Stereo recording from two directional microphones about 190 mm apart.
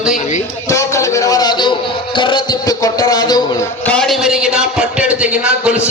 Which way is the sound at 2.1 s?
25° left (ahead or behind).